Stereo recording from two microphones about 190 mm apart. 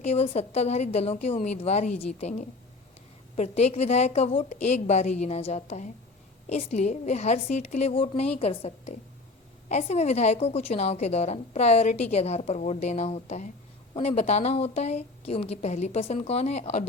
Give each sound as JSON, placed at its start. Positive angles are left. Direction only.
{"t": 0.0, "sound": "a woman's voice", "side_deg": 35}